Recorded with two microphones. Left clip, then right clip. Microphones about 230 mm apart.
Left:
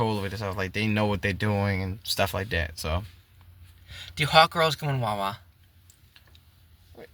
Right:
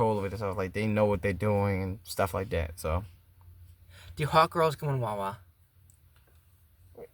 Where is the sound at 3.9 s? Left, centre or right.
Centre.